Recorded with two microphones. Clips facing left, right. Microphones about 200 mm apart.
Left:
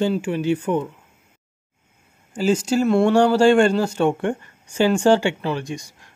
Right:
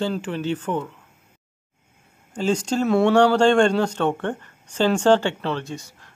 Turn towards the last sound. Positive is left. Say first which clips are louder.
# left 2 dB
turn(degrees=15)  # may be behind; listen again after turning